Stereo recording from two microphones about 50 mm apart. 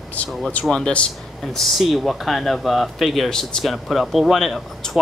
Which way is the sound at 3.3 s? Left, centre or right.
Centre.